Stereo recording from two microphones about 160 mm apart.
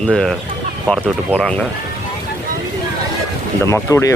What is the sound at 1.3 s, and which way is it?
Speech, 10° left (ahead or behind).